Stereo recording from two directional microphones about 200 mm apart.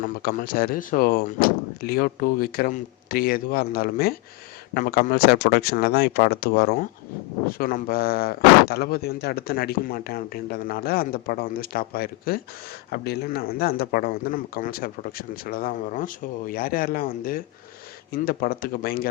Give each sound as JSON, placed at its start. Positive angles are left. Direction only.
{"t": 0.0, "sound": "speech", "side_deg": 45}